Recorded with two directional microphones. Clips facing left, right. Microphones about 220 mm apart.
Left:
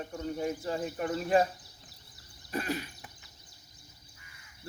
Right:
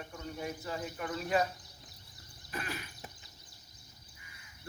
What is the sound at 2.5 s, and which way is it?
Cough, 35° left (ahead or behind).